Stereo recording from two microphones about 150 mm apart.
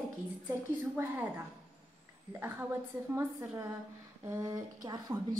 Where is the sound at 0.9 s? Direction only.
15° right (ahead or behind).